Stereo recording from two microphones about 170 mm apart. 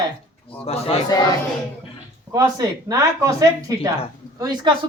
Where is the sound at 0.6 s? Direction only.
35° left (ahead or behind).